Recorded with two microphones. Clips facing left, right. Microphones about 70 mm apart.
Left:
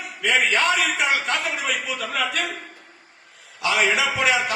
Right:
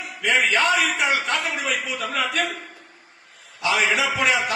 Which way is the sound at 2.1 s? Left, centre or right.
Centre.